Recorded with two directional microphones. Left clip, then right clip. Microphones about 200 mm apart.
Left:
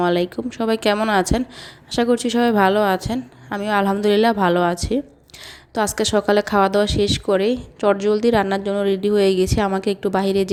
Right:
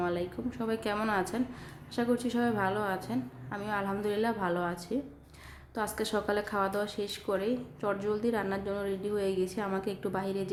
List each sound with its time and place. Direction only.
0.0 s a woman's voice: 45° left (ahead or behind)